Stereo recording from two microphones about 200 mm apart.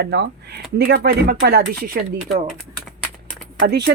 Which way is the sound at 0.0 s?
55° right (ahead or behind).